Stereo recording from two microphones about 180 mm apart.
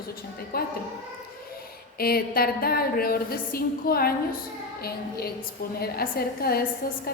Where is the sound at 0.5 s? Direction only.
55° left (ahead or behind).